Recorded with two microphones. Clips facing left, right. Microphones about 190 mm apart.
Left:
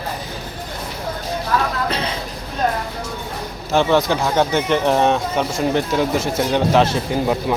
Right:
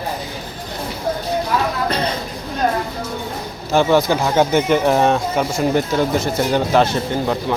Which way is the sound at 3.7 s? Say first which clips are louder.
Right 2 dB; 5° right (ahead or behind).